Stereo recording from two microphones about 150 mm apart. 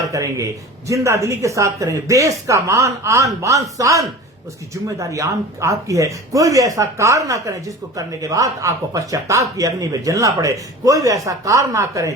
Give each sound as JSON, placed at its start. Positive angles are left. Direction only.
{"t": 0.1, "sound": "speech", "side_deg": -20}